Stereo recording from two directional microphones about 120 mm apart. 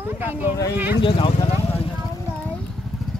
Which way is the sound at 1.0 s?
45° left (ahead or behind).